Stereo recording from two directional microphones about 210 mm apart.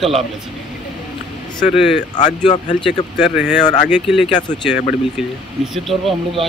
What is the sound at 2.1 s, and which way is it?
Speech, 20° left (ahead or behind).